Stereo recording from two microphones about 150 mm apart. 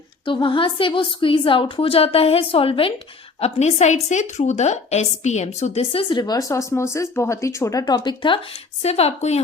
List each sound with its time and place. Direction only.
0.3 s a woman's voice: 35° left (ahead or behind)
3.4 s a woman's voice: 45° left (ahead or behind); by 8.4 s 30° left (ahead or behind)
8.8 s a woman's voice: 45° left (ahead or behind)